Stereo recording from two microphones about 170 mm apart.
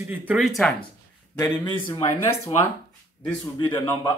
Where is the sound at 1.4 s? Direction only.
20° left (ahead or behind).